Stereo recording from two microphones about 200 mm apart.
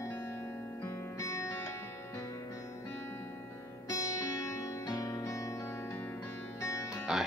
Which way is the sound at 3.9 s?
15° left (ahead or behind).